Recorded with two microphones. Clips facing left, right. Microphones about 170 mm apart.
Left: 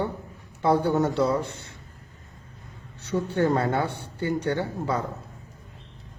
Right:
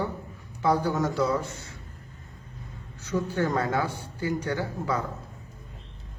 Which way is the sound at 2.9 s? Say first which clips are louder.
Left 1 dB; 30° left (ahead or behind).